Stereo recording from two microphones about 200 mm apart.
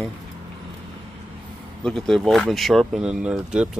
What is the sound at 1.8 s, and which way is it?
Speech, 5° left (ahead or behind).